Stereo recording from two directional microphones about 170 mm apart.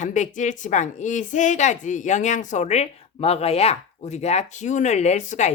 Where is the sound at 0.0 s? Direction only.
45° left (ahead or behind).